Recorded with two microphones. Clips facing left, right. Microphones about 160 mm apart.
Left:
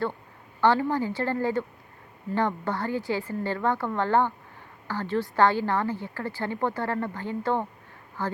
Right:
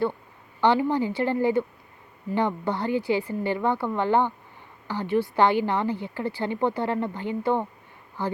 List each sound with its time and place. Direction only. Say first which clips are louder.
0.6 s a woman's voice: right 1 dB; 15° right (ahead or behind)